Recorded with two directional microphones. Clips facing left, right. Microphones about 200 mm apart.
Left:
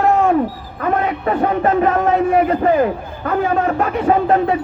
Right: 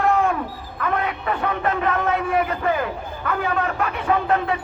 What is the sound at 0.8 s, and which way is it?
A man's voice, 40° left (ahead or behind).